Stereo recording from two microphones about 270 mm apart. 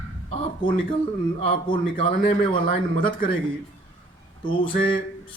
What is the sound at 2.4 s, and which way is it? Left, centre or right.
Speech, left.